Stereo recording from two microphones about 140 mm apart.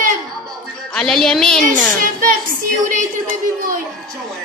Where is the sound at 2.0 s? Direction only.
80° right.